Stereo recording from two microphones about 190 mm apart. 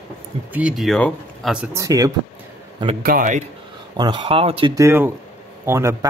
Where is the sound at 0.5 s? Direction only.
5° right (ahead or behind).